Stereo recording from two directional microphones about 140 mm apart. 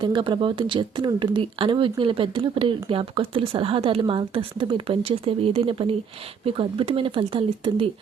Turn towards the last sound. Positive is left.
turn(degrees=-40)  # may be behind; listen again after turning